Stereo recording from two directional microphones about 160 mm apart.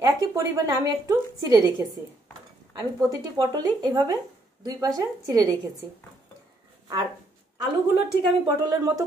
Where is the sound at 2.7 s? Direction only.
20° right (ahead or behind).